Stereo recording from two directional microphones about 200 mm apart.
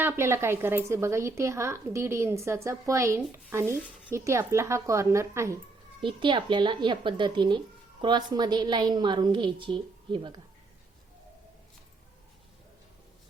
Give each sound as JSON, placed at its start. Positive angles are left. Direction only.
{"t": 0.0, "sound": "a woman's voice", "side_deg": -10}
{"t": 6.0, "sound": "a woman's voice", "side_deg": -25}